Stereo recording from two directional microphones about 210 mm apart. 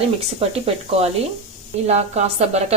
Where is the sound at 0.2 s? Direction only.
30° right (ahead or behind).